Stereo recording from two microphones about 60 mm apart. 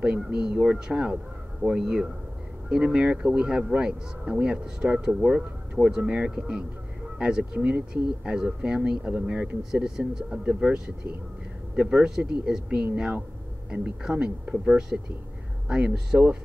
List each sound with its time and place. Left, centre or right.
0.0 s speech: centre